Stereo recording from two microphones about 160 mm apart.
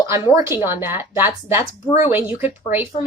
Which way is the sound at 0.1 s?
15° right (ahead or behind).